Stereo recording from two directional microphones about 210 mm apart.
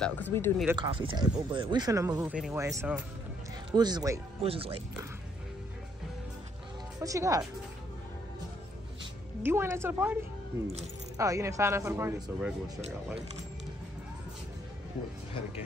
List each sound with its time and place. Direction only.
0.0 s speech: 10° left (ahead or behind)
0.7 s speech: 25° right (ahead or behind)
7.0 s speech: 15° right (ahead or behind)
9.4 s speech: 10° right (ahead or behind)
11.1 s speech: 15° right (ahead or behind)